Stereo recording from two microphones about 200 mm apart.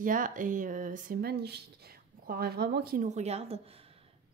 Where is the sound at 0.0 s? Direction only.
40° right (ahead or behind).